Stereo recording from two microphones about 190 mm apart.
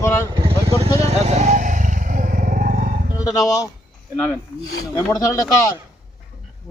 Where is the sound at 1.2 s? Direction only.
40° right (ahead or behind).